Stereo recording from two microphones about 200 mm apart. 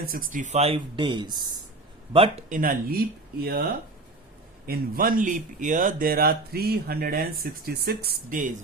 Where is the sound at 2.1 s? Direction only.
35° right (ahead or behind); by 3.6 s 50° right (ahead or behind).